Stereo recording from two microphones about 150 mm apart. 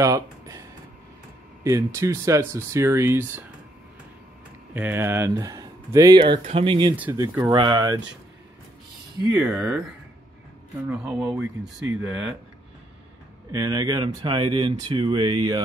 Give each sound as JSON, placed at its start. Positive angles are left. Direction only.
{"t": 0.0, "sound": "a sound", "side_deg": -20}
{"t": 1.6, "sound": "speech", "side_deg": -20}
{"t": 4.7, "sound": "speech", "side_deg": -15}
{"t": 7.0, "sound": "speech", "side_deg": -15}
{"t": 9.4, "sound": "speech", "side_deg": -10}
{"t": 10.9, "sound": "speech", "side_deg": -10}
{"t": 13.5, "sound": "speech", "side_deg": -25}